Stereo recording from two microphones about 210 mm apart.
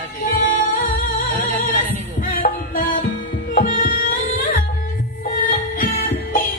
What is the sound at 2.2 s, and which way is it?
Music, 40° left (ahead or behind).